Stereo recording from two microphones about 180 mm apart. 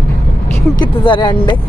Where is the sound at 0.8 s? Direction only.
25° left (ahead or behind).